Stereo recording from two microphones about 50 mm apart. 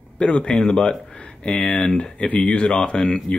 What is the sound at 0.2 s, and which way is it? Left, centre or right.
Speech, centre.